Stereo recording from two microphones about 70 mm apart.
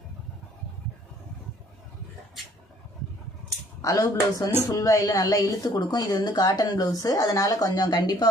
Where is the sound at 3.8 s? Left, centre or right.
Left.